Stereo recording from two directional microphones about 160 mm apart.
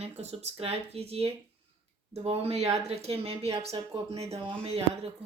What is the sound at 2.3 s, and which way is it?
A woman's voice, 40° right (ahead or behind).